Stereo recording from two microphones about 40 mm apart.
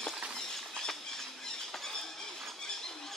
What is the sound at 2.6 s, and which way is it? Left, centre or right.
Squeal, centre.